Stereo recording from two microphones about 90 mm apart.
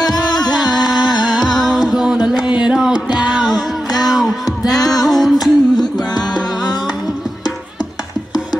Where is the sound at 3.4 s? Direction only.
45° left (ahead or behind).